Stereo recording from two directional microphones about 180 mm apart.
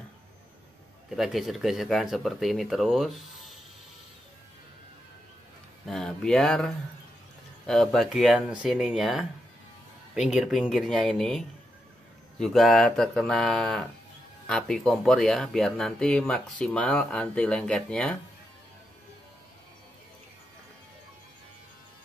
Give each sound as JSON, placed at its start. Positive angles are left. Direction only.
{"t": 1.1, "sound": "speech", "side_deg": 0}
{"t": 5.9, "sound": "speech", "side_deg": 5}